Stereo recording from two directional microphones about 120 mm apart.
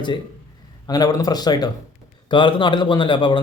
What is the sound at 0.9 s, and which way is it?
A man's voice, 30° left (ahead or behind).